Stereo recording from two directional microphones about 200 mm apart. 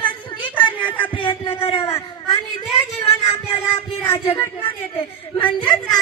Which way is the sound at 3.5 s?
30° left (ahead or behind).